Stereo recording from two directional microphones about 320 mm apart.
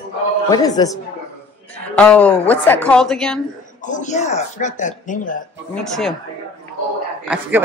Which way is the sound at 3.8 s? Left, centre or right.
Left.